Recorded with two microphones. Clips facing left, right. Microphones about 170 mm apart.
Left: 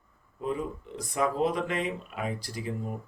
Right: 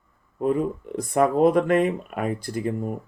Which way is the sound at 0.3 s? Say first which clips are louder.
Right 9 dB; 55° right (ahead or behind).